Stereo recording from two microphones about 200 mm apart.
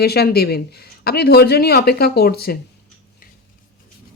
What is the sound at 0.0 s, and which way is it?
Speech, 55° left (ahead or behind).